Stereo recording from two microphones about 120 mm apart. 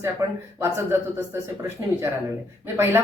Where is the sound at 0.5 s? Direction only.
20° right (ahead or behind).